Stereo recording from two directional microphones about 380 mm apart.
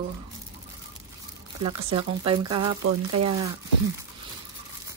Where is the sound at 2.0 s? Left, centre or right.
Centre.